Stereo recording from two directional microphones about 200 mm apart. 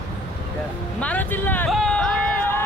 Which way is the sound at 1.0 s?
10° left (ahead or behind).